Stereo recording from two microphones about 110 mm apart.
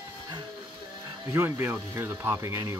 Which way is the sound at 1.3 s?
20° right (ahead or behind).